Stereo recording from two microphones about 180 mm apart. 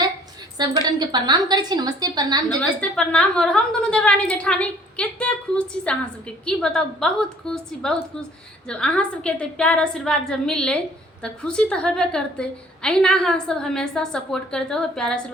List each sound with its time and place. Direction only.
0.6 s speech: 20° right (ahead or behind)
2.6 s a woman's voice: 5° left (ahead or behind)